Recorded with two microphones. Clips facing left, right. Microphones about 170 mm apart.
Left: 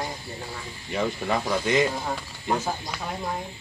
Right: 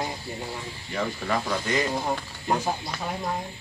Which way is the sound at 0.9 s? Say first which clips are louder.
Left 2 dB; 20° left (ahead or behind).